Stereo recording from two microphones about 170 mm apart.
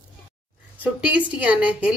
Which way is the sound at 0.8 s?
10° right (ahead or behind).